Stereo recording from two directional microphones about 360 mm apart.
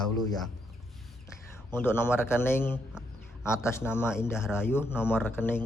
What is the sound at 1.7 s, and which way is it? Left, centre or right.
A man's voice, centre.